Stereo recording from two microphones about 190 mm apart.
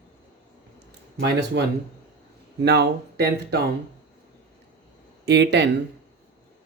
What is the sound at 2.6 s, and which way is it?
Speech, 60° right (ahead or behind).